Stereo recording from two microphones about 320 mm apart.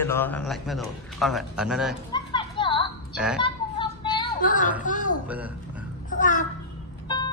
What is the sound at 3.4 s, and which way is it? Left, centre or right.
Child singing, centre.